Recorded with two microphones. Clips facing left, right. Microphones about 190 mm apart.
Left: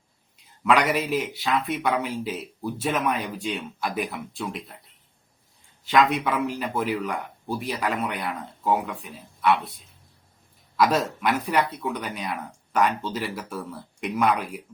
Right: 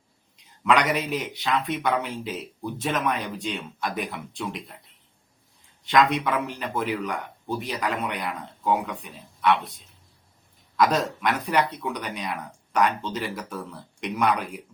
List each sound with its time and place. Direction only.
0.6 s speech: 5° left (ahead or behind)
5.9 s speech: 10° left (ahead or behind)
10.8 s speech: 5° left (ahead or behind)